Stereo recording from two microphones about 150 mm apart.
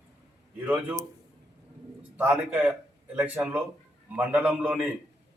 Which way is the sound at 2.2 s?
10° right (ahead or behind).